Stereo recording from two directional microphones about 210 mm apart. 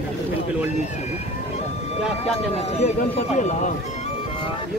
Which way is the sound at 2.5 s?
30° left (ahead or behind).